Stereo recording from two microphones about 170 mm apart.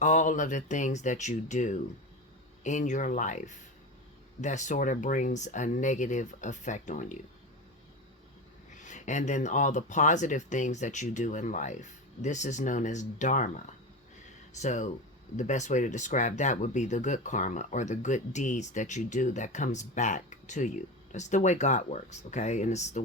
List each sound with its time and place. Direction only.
0.0 s speech: 45° left (ahead or behind)
8.8 s speech: 45° left (ahead or behind)
14.6 s speech: 45° left (ahead or behind)